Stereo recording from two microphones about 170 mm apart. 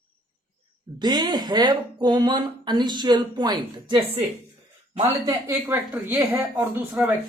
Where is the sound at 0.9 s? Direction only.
25° right (ahead or behind).